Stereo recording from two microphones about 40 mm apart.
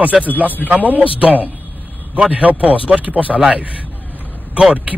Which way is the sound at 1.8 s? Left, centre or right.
Left.